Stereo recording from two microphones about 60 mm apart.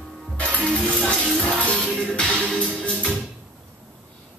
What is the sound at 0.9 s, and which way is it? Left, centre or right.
Music, centre.